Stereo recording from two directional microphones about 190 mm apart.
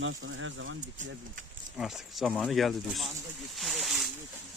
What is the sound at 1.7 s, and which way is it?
Speech, centre (ahead or behind).